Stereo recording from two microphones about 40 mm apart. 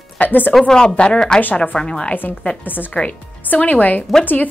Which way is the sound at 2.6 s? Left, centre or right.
Left.